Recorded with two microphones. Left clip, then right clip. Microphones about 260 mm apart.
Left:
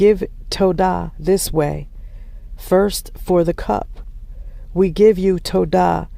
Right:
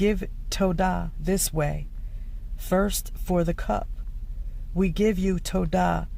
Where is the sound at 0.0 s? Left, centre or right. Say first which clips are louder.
Left 12 dB; left.